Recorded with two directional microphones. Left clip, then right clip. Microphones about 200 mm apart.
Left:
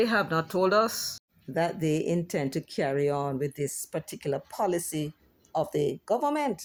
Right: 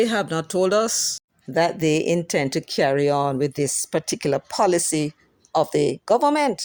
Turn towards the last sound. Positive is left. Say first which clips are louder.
# right 9 dB
turn(degrees=-35)  # may be behind; listen again after turning